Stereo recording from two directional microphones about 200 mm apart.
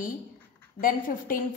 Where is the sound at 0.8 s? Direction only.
45° left (ahead or behind).